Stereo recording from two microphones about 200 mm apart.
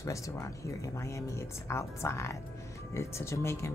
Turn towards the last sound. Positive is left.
turn(degrees=15)  # may be behind; listen again after turning